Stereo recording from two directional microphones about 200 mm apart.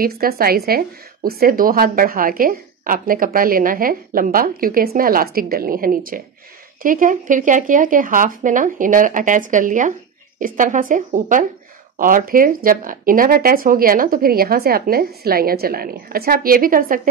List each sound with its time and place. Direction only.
0.0 s speech: 45° right (ahead or behind)